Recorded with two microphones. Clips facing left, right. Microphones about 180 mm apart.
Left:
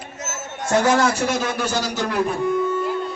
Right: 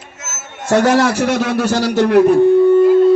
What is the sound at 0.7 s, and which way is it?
A man's voice, 70° right (ahead or behind).